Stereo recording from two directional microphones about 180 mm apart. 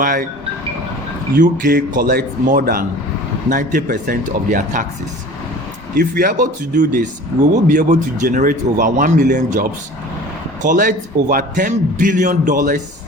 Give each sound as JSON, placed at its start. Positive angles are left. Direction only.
{"t": 0.0, "sound": "a man's voice", "side_deg": -50}
{"t": 1.4, "sound": "a man's voice", "side_deg": -50}
{"t": 6.0, "sound": "a man's voice", "side_deg": -50}